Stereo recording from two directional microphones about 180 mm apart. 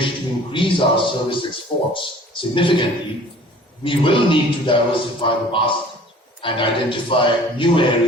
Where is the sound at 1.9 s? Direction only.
30° left (ahead or behind).